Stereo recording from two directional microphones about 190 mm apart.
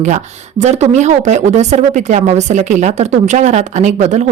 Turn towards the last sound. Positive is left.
turn(degrees=-40)  # may be behind; listen again after turning